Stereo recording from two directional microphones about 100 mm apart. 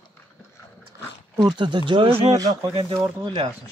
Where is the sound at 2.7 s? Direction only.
60° right (ahead or behind).